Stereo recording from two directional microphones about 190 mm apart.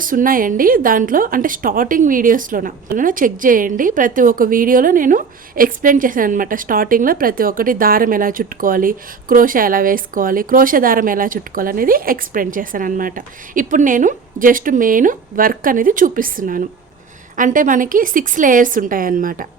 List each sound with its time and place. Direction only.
0.0 s a woman's voice: 45° right (ahead or behind)